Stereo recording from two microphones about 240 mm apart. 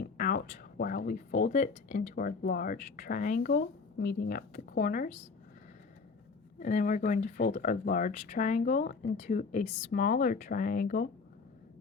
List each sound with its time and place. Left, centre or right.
0.0 s speech: left
6.6 s speech: left